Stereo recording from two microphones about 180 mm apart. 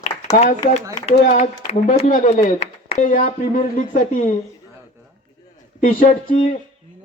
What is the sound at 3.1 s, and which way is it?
Speech, 50° left (ahead or behind).